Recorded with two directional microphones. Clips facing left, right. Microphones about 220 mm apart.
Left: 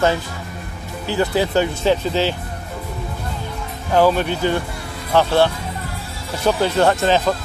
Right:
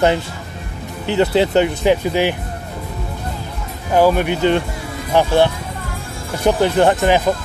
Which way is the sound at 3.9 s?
15° right (ahead or behind).